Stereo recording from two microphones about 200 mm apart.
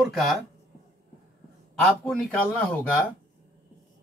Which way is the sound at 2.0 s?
5° left (ahead or behind).